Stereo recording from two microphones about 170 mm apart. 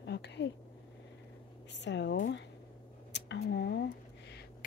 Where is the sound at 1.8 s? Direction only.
90° left.